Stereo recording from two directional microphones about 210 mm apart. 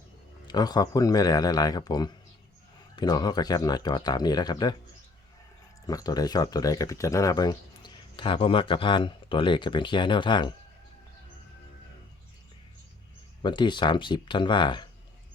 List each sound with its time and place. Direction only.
0.4 s speech: 20° left (ahead or behind)
5.8 s speech: 15° left (ahead or behind)
13.4 s speech: 20° left (ahead or behind)